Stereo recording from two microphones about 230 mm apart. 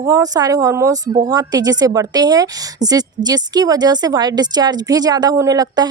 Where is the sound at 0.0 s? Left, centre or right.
Centre.